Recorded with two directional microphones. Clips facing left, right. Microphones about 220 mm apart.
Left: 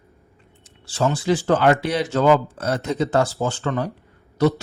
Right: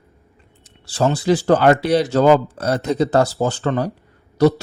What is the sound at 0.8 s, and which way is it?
Speech, 35° right (ahead or behind).